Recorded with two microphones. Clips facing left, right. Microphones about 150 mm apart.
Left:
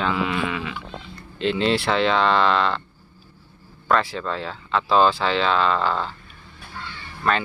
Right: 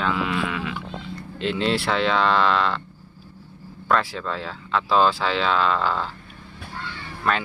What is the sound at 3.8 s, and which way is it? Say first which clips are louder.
Speech: left 1 dB; centre (ahead or behind).